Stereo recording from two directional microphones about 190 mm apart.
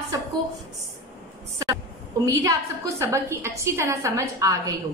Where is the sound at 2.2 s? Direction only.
15° right (ahead or behind).